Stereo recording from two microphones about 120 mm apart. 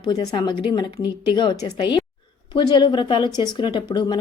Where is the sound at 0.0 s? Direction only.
35° left (ahead or behind).